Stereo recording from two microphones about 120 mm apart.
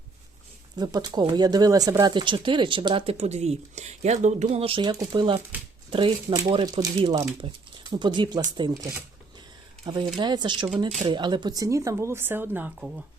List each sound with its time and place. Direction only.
0.8 s speech: 35° right (ahead or behind)
3.2 s speech: 65° right (ahead or behind); by 4.6 s 80° right
4.6 s speech: 45° right (ahead or behind)
10.2 s speech: 40° right (ahead or behind); by 12.9 s 15° right (ahead or behind)